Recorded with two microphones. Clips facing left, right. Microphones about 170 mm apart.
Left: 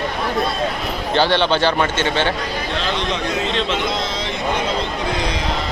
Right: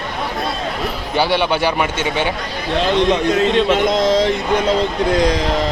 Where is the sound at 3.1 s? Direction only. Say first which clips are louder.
Right 7 dB; 50° right (ahead or behind).